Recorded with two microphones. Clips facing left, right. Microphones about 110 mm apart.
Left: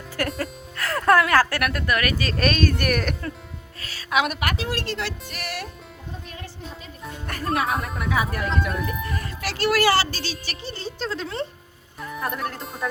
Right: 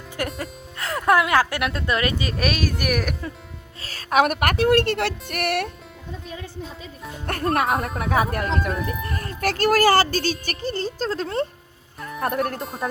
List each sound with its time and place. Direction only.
0.2 s speech: 20° right (ahead or behind)
2.3 s speech: 5° right (ahead or behind)
3.9 s a woman's voice: 45° right (ahead or behind)
7.3 s speech: 50° right (ahead or behind)
8.6 s speech: centre (ahead or behind)
9.2 s speech: 45° right (ahead or behind)
11.9 s music: centre (ahead or behind)
12.2 s speech: 50° right (ahead or behind)
12.5 s speech: centre (ahead or behind)